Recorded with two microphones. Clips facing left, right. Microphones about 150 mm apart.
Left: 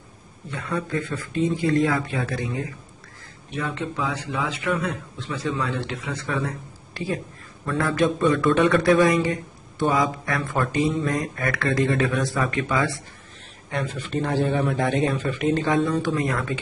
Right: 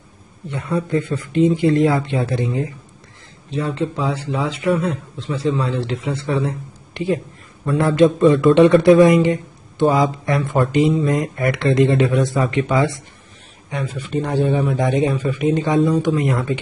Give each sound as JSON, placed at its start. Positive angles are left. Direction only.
{"t": 0.5, "sound": "speech", "side_deg": -25}
{"t": 13.7, "sound": "a man's voice", "side_deg": -5}
{"t": 15.7, "sound": "speech", "side_deg": 0}
{"t": 16.0, "sound": "speech", "side_deg": -20}